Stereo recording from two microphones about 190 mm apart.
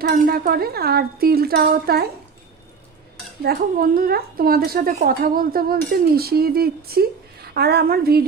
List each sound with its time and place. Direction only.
0.0 s speech: 50° right (ahead or behind)
3.4 s speech: 50° right (ahead or behind)